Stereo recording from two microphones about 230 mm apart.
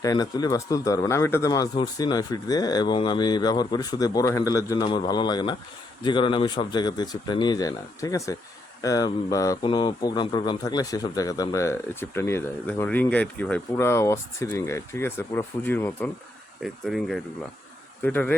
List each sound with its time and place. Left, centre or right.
0.0 s speech: centre